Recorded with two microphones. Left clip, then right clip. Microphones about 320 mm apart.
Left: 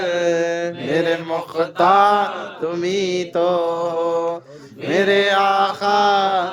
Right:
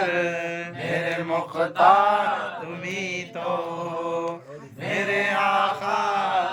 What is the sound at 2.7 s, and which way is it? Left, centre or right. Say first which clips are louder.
Mantra: left 10 dB; centre.